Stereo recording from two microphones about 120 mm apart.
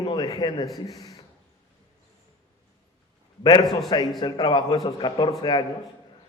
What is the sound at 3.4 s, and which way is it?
A man's voice, 40° left (ahead or behind).